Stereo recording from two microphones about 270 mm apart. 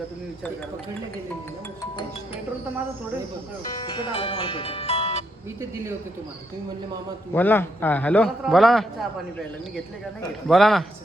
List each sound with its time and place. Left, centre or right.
3.8 s speech: centre
5.5 s speech: centre
7.3 s a man's voice: centre